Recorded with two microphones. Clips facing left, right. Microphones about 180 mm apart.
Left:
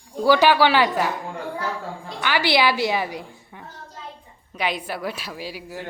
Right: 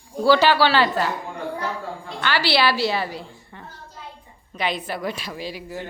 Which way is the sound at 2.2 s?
15° left (ahead or behind).